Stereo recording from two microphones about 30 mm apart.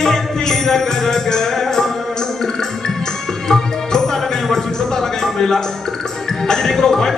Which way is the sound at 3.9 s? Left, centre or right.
Centre.